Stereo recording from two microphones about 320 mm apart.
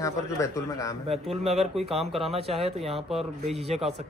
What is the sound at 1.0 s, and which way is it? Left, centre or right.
A man's voice, centre.